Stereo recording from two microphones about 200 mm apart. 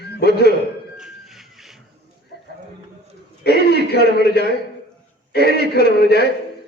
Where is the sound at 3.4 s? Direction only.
55° left (ahead or behind).